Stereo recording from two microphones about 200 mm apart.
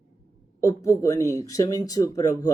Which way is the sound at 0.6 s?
15° left (ahead or behind).